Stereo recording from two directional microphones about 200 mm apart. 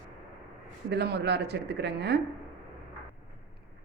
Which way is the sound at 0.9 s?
55° right (ahead or behind).